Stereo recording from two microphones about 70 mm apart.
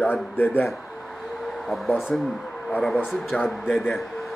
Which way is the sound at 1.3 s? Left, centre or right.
Centre.